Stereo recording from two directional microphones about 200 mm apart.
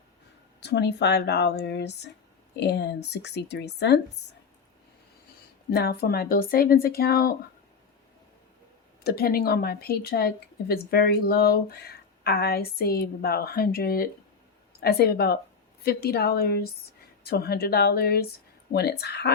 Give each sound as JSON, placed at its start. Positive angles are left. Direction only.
{"t": 0.6, "sound": "a woman's voice", "side_deg": 55}
{"t": 5.7, "sound": "a woman's voice", "side_deg": 50}
{"t": 9.0, "sound": "a woman's voice", "side_deg": 50}